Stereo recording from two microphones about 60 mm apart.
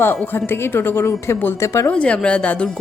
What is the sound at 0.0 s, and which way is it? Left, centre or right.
Speech, left.